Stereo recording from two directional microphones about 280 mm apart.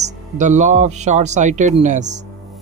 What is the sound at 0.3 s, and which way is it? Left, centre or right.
Speech, right.